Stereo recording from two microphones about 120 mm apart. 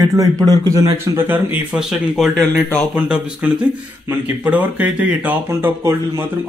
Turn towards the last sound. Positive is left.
turn(degrees=-15)  # may be behind; listen again after turning